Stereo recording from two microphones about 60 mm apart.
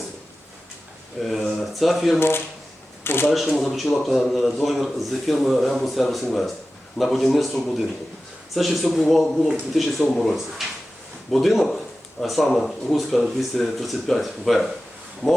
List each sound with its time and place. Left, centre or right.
1.2 s speech: centre
2.1 s speech: left
3.0 s shuffling cards: left
3.2 s a man's voice: centre